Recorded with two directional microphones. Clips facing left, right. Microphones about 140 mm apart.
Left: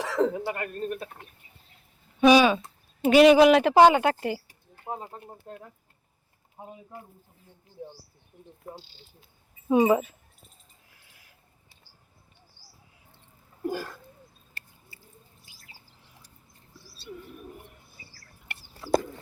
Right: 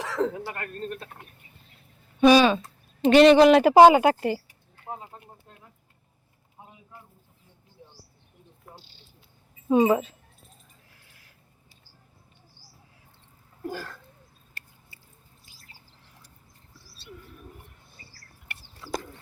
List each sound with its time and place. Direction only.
0.0 s speech: 5° left (ahead or behind)
2.2 s speech: 10° left (ahead or behind)
3.6 s speech: 10° right (ahead or behind)
4.4 s mouse: 30° left (ahead or behind)
9.6 s speech: 10° left (ahead or behind)
11.1 s a sound: 15° left (ahead or behind)
13.6 s a sound: 15° left (ahead or behind)
17.2 s bird: 20° left (ahead or behind)
18.8 s chicken: 35° left (ahead or behind)